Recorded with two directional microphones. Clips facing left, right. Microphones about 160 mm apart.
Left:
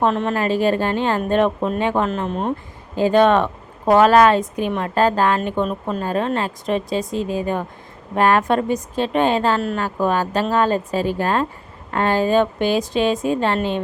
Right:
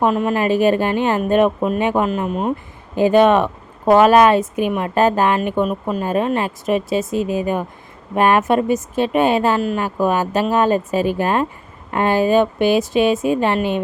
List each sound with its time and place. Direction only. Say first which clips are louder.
0.0 s speech: right 2 dB; 10° right (ahead or behind)